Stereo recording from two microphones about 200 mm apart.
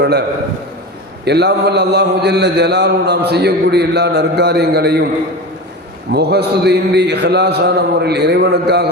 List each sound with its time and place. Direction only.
0.0 s a man's voice: 55° right (ahead or behind)
1.2 s mantra: 55° right (ahead or behind)
6.1 s mantra: 55° right (ahead or behind)